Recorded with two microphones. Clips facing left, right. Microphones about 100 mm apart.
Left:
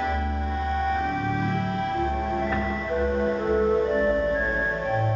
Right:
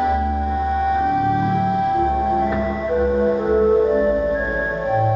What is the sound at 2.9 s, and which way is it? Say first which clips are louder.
Music: right 7 dB; 15° right (ahead or behind).